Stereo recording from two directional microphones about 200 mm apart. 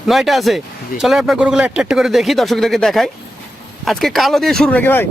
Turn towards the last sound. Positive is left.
turn(degrees=10)  # may be behind; listen again after turning